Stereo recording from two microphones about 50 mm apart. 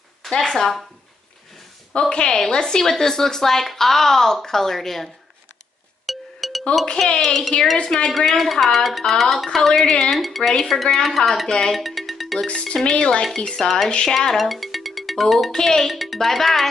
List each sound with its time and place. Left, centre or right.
0.3 s speech: centre
1.9 s speech: centre
6.0 s music: centre
7.2 s speech: centre
7.7 s speech: centre
8.3 s speech: centre
11.7 s music: centre
12.4 s speech: centre
13.6 s speech: centre
13.8 s speech: centre
14.1 s speech: centre